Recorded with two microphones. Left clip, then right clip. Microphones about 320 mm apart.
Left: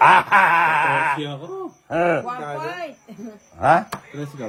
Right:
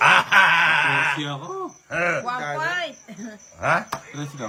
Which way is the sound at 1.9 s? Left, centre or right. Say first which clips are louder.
Left 4 dB; centre.